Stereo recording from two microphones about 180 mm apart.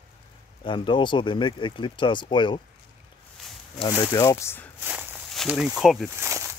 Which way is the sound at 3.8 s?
20° left (ahead or behind).